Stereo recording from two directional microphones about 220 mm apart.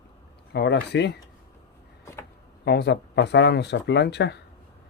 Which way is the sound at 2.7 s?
50° left (ahead or behind).